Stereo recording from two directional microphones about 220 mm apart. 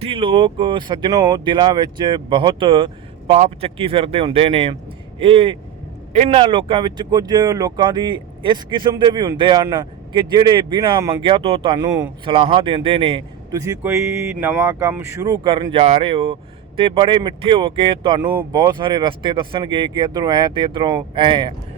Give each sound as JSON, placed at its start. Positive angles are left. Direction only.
{"t": 0.0, "sound": "speech", "side_deg": -25}